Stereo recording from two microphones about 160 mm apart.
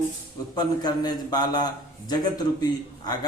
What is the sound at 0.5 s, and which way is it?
Speech, 25° left (ahead or behind).